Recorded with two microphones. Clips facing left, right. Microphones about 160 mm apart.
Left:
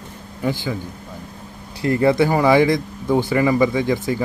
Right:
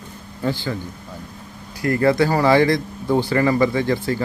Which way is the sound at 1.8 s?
20° left (ahead or behind).